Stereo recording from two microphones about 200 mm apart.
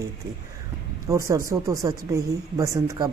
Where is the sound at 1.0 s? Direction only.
15° right (ahead or behind).